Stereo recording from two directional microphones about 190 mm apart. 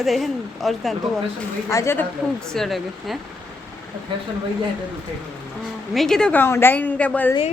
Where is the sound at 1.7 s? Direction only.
15° left (ahead or behind).